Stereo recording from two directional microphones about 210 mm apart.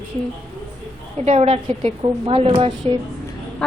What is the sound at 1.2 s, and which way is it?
A woman's voice, 30° right (ahead or behind).